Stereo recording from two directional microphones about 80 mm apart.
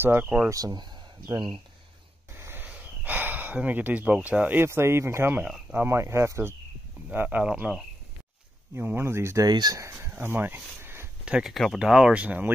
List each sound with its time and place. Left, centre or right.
0.0 s speech: right
0.5 s speech: right
2.3 s a sound: right
4.6 s speech: right
7.2 s speech: centre
8.7 s speech: right
9.5 s speech: right
9.8 s speech: right
11.2 s speech: centre
11.5 s speech: centre; by 12.5 s right